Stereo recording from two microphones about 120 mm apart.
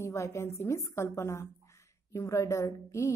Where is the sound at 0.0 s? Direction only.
25° left (ahead or behind).